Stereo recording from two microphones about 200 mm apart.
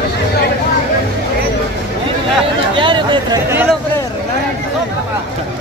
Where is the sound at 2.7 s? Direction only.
25° right (ahead or behind).